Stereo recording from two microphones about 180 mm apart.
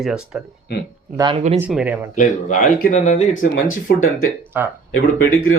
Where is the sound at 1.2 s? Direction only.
25° right (ahead or behind).